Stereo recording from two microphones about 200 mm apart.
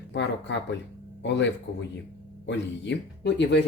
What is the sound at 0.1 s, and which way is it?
Speech, 65° left (ahead or behind).